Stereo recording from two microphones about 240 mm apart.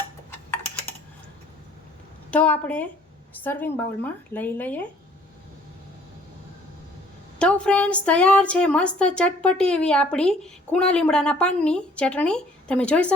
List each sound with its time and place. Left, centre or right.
2.3 s a woman's voice: centre
7.3 s a woman's voice: centre